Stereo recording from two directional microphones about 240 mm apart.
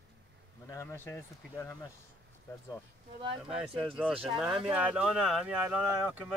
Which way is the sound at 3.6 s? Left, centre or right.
Centre.